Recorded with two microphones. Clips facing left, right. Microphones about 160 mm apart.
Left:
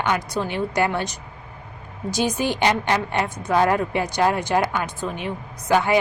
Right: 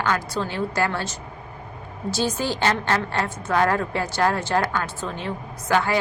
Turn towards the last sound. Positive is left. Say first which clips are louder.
# left 2 dB
turn(degrees=15)  # may be behind; listen again after turning